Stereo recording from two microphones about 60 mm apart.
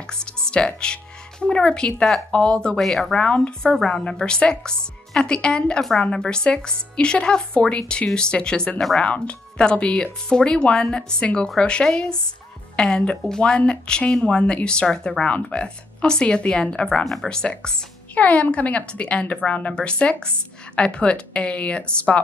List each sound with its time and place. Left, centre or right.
0.0 s speech: centre
2.8 s speech: centre
17.0 s speech: centre
17.3 s speech: centre
18.1 s a woman's voice: left